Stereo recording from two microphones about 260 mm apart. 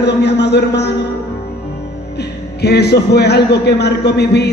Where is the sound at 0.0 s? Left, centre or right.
Left.